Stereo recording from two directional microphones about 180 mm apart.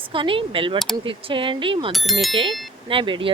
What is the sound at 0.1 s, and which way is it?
A woman's voice, 30° right (ahead or behind).